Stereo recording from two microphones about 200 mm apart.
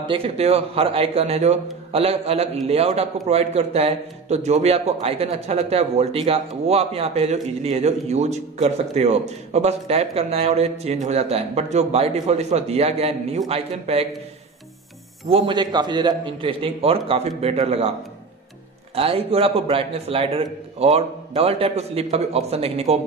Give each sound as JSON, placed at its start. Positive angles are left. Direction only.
{"t": 0.0, "sound": "a man's voice", "side_deg": -25}
{"t": 15.2, "sound": "a man's voice", "side_deg": -25}
{"t": 18.9, "sound": "a man's voice", "side_deg": -30}